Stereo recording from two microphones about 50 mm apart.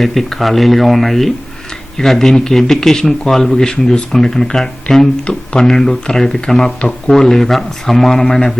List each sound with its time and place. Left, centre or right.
0.0 s speech: centre